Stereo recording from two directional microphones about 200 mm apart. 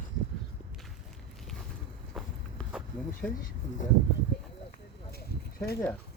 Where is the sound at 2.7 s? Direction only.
5° left (ahead or behind).